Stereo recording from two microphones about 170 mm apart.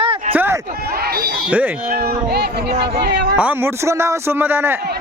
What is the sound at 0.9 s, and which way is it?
Speech, 65° right (ahead or behind).